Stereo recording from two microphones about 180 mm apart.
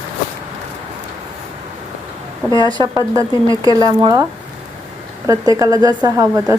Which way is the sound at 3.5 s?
25° left (ahead or behind).